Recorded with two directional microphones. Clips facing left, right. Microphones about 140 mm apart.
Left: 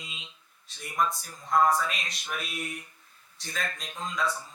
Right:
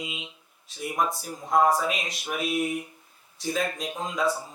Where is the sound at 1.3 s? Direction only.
25° right (ahead or behind).